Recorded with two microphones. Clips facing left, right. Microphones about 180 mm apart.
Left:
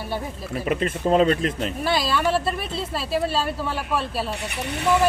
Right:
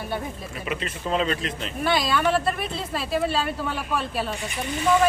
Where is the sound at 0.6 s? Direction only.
45° left (ahead or behind).